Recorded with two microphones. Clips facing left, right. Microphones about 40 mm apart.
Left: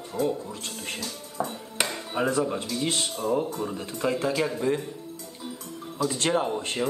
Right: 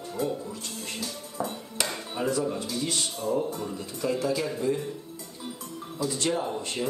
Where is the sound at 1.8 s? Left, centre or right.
Left.